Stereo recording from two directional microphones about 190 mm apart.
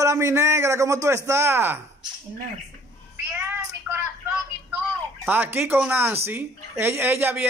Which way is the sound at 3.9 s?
10° right (ahead or behind).